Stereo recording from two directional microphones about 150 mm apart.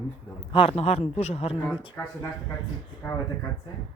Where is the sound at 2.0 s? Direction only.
10° left (ahead or behind).